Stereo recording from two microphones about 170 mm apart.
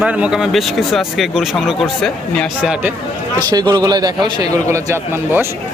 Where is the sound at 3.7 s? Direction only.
25° right (ahead or behind).